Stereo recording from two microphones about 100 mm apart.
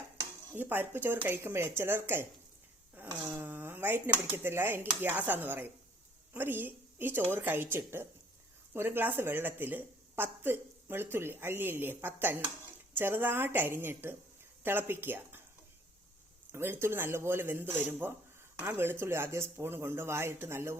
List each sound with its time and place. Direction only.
0.5 s a woman's voice: 20° right (ahead or behind)
3.3 s a woman's voice: 20° right (ahead or behind)
16.5 s a woman's voice: 25° right (ahead or behind)